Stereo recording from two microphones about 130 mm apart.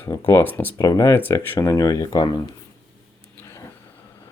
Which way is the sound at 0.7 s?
25° left (ahead or behind).